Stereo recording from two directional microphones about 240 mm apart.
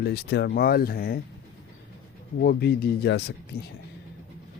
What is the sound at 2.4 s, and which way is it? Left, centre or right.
Speech, left.